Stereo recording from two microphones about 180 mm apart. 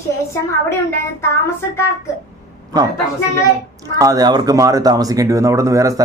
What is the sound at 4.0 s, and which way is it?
A man's voice, 20° right (ahead or behind).